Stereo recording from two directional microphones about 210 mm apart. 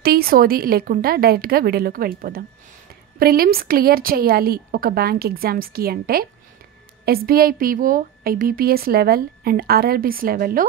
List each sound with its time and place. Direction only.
0.0 s a woman's voice: 45° right (ahead or behind)